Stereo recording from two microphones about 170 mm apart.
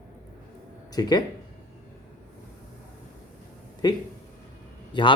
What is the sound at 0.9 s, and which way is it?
Speech, 25° left (ahead or behind).